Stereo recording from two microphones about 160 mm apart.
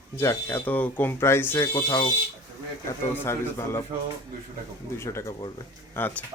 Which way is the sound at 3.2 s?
15° left (ahead or behind).